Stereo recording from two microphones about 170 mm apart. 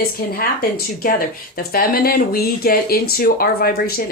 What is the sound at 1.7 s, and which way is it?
A woman's voice, 60° left (ahead or behind).